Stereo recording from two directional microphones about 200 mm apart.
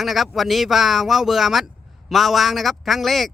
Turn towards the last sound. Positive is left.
turn(degrees=0)  # may be behind; listen again after turning